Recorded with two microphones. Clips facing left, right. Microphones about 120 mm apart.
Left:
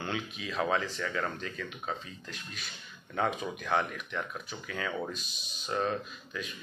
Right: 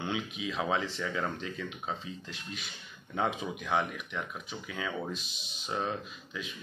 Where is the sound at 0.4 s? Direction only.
15° right (ahead or behind).